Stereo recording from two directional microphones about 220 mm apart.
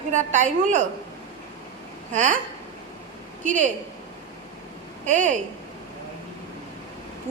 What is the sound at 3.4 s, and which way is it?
Speech, 35° right (ahead or behind).